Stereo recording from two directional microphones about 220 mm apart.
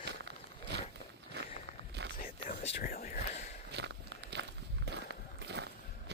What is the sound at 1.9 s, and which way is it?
Zipper, 50° right (ahead or behind).